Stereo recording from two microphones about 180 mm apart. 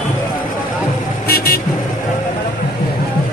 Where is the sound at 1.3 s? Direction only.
55° left (ahead or behind).